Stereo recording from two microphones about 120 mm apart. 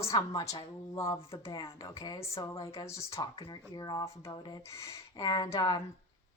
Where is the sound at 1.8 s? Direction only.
30° left (ahead or behind).